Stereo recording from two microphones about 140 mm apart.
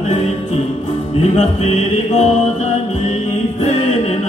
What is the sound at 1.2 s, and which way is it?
Music, 55° left (ahead or behind).